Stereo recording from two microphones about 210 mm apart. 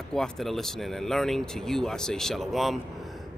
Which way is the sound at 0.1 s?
Centre (ahead or behind).